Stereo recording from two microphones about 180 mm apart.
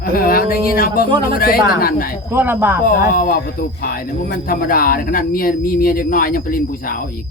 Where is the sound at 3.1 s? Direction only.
55° left (ahead or behind).